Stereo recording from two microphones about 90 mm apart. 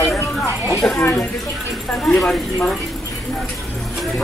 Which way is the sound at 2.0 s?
10° left (ahead or behind).